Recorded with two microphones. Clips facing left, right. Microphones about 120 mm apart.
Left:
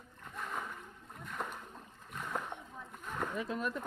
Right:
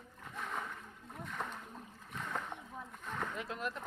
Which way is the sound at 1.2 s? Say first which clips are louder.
Left 1 dB; centre (ahead or behind).